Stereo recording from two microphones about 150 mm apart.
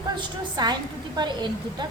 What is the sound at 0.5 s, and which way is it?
A woman's voice, 25° right (ahead or behind).